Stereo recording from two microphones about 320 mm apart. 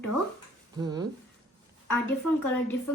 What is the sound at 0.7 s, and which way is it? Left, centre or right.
Speech, centre.